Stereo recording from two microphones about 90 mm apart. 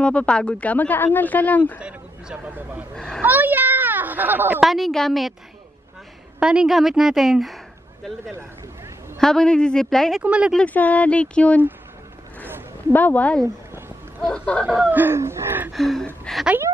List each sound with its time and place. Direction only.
0.0 s speech: 10° left (ahead or behind)
1.8 s speech: 10° right (ahead or behind)
3.2 s a sound: 20° right (ahead or behind)
4.6 s a woman's voice: centre (ahead or behind)
6.4 s speech: 10° right (ahead or behind)
9.2 s speech: 5° left (ahead or behind)
10.2 s speech: 15° right (ahead or behind)
10.5 s speech: 15° left (ahead or behind)
12.9 s speech: 20° left (ahead or behind)
14.9 s gasp: 25° right (ahead or behind)
15.7 s a woman's voice: centre (ahead or behind)